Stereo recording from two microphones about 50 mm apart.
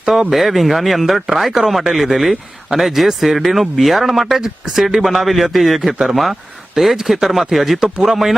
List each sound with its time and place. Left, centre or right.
0.0 s speech: centre